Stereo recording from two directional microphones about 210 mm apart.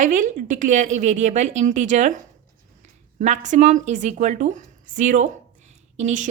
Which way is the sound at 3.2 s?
35° right (ahead or behind).